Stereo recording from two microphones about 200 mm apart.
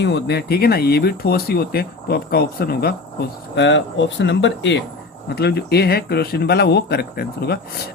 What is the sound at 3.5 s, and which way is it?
Speech, 65° left (ahead or behind).